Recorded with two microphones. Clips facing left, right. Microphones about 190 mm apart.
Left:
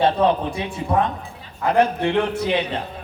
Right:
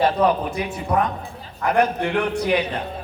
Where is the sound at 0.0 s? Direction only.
25° left (ahead or behind).